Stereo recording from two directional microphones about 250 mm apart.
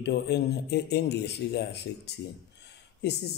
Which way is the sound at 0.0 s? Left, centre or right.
Left.